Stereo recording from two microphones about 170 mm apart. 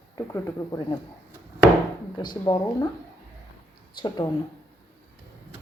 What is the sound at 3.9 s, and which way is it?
Speech, 25° left (ahead or behind).